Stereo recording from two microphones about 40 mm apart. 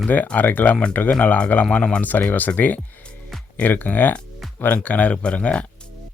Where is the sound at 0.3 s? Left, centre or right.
Left.